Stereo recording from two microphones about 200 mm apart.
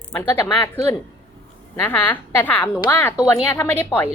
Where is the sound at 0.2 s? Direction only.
10° left (ahead or behind).